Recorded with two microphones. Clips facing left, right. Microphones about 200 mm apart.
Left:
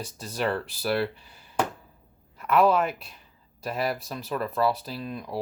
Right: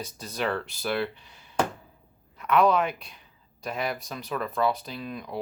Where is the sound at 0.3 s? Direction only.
Centre (ahead or behind).